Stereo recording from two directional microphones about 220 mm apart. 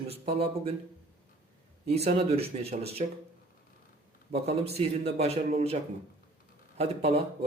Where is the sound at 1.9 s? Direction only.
30° right (ahead or behind).